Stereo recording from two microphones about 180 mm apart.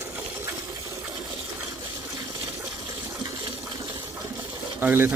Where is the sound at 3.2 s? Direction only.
25° right (ahead or behind).